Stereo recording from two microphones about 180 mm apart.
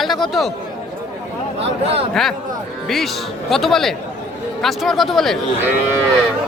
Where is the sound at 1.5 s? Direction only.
35° right (ahead or behind).